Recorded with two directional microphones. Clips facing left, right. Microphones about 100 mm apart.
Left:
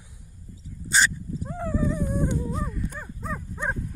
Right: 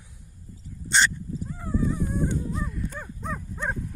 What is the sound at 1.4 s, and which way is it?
Horse, 65° left (ahead or behind).